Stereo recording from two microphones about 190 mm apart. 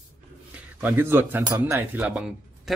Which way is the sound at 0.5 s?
10° right (ahead or behind).